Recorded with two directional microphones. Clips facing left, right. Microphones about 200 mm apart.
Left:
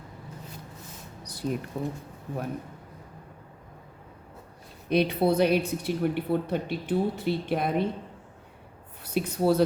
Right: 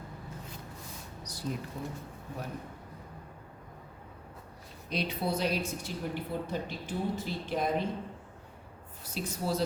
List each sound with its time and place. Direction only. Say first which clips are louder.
1.2 s a sound: left 8 dB; 60° left (ahead or behind)
1.7 s a woman's voice: left 8 dB; 55° left (ahead or behind)
4.9 s a woman's voice: left 10 dB; 60° left (ahead or behind)
9.1 s a woman's voice: left 9 dB; 60° left (ahead or behind)